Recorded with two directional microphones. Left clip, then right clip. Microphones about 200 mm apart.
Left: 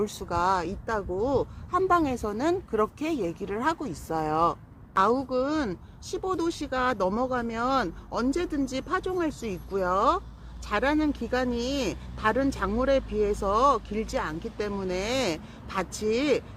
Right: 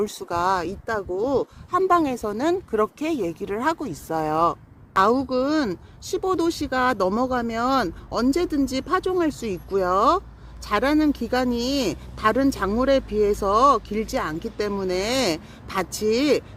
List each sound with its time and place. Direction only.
0.0 s speech: 45° right (ahead or behind)